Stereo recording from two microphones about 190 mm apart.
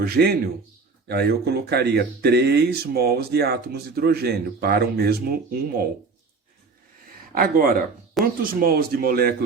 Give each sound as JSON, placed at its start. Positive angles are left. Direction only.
{"t": 0.0, "sound": "speech", "side_deg": -55}
{"t": 7.3, "sound": "speech", "side_deg": -50}